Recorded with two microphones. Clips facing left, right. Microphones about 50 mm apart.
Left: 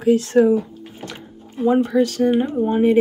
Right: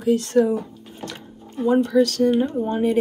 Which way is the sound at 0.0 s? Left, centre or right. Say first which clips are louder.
Left 3 dB; left.